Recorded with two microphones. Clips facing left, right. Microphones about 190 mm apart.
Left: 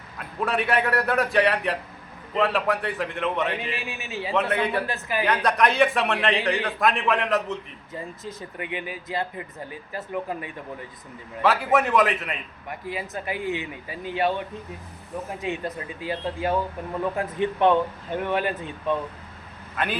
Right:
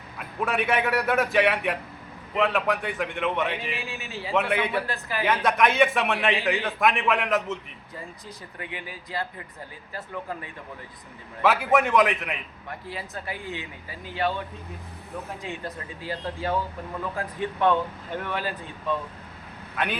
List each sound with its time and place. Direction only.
0.2 s a man's voice: centre (ahead or behind)
3.8 s speech: 20° left (ahead or behind)
4.4 s a man's voice: centre (ahead or behind)
4.9 s speech: 20° left (ahead or behind)
5.2 s a man's voice: centre (ahead or behind)
8.2 s speech: 20° left (ahead or behind)
11.4 s a man's voice: centre (ahead or behind)
12.9 s speech: 15° left (ahead or behind)
19.7 s speech: centre (ahead or behind)